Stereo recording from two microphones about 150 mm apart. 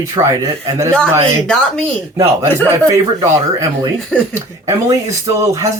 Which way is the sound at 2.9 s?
20° right (ahead or behind).